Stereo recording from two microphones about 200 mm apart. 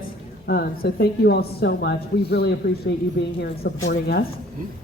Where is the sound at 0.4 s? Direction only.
50° left (ahead or behind).